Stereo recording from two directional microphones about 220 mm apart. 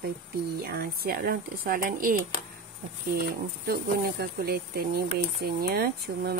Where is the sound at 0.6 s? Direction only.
45° right (ahead or behind).